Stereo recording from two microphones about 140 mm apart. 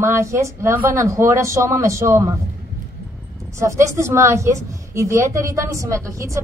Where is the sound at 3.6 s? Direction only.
20° right (ahead or behind).